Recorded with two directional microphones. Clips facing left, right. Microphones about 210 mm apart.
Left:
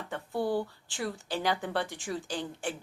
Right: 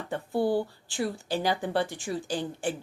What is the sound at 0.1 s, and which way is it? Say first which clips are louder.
Speech: right 4 dB; 30° right (ahead or behind).